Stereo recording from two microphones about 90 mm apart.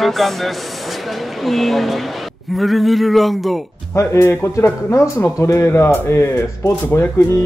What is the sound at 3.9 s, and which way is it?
Speech, 25° left (ahead or behind).